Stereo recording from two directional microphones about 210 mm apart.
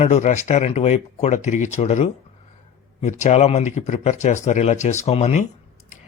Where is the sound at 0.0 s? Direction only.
35° left (ahead or behind).